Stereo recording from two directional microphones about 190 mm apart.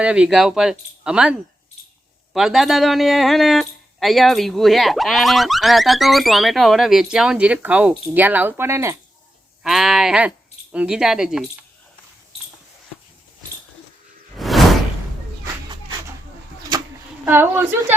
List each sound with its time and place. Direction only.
0.0 s speech: 5° right (ahead or behind)
9.6 s speech: centre (ahead or behind)
14.3 s whoosh: centre (ahead or behind)
16.7 s a sound: 20° right (ahead or behind)
17.2 s a woman's voice: 10° right (ahead or behind)